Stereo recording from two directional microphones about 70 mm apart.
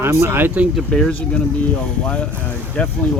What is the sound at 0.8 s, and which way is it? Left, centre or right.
Speech, centre.